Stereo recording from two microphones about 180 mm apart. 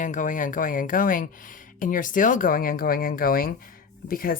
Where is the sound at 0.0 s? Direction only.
45° left (ahead or behind).